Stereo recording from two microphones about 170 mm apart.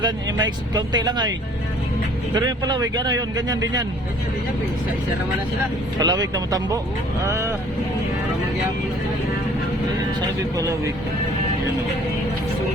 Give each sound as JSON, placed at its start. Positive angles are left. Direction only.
{"t": 0.0, "sound": "speech", "side_deg": -20}
{"t": 2.3, "sound": "speech", "side_deg": -25}
{"t": 6.0, "sound": "speech", "side_deg": -20}
{"t": 10.2, "sound": "speech", "side_deg": -20}